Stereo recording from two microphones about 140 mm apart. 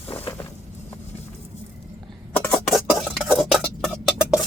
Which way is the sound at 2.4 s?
10° left (ahead or behind).